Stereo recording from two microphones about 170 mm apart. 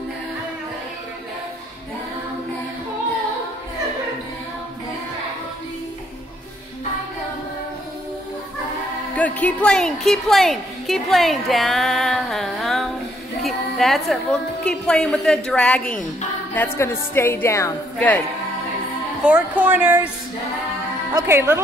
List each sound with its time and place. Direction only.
9.1 s a woman's voice: 10° left (ahead or behind)
19.2 s speech: 5° right (ahead or behind)
21.1 s speech: 20° right (ahead or behind)